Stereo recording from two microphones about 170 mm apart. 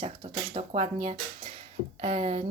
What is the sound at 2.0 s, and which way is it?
Speech, 40° right (ahead or behind).